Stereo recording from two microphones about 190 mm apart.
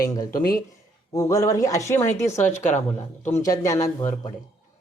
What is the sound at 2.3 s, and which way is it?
Speech, 40° left (ahead or behind).